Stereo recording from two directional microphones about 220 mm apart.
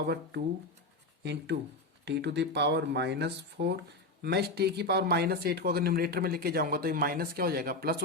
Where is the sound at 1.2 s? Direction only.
50° right (ahead or behind).